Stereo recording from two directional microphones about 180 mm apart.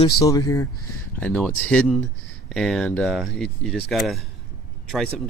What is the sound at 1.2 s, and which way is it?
Speech, 10° left (ahead or behind).